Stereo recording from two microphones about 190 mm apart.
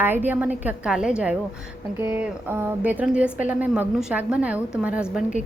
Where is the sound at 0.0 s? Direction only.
10° right (ahead or behind).